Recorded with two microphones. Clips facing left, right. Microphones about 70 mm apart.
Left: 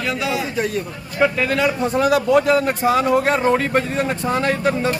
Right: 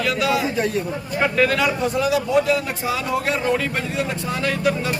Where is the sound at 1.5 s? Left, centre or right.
Left.